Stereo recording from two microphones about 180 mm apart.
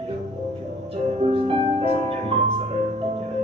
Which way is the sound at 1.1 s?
30° right (ahead or behind).